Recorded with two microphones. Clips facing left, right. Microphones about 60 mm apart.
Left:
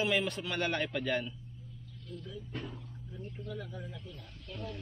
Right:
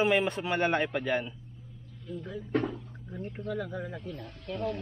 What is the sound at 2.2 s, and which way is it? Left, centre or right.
Speech, right.